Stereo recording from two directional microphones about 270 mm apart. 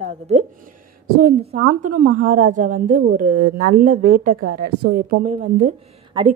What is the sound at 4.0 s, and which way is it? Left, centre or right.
Speech, right.